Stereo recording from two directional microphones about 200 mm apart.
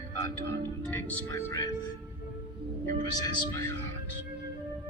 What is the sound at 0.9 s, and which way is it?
Speech, 10° left (ahead or behind).